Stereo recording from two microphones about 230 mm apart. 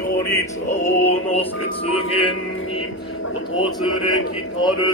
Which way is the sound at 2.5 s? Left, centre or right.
Left.